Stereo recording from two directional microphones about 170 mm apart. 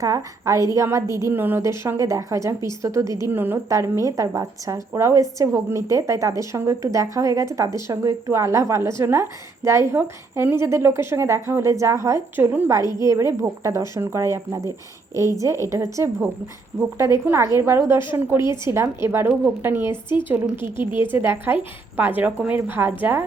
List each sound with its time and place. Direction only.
0.0 s a woman's voice: 20° right (ahead or behind)